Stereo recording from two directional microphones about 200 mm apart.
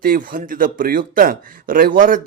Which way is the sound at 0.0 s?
45° right (ahead or behind).